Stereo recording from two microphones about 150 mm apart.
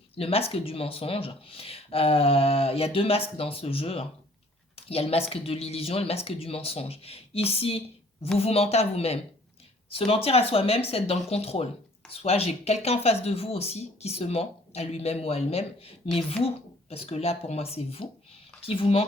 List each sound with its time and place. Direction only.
0.2 s speech: 40° left (ahead or behind)